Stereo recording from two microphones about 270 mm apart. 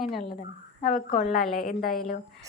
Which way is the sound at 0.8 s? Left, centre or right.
Left.